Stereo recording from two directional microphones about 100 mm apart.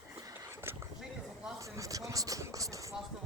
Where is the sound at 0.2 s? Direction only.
30° right (ahead or behind).